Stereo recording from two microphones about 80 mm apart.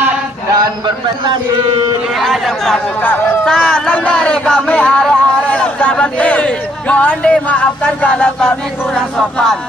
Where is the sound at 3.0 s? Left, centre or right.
Left.